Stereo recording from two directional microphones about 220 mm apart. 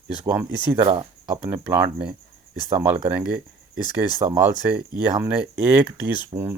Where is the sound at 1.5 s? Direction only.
10° right (ahead or behind).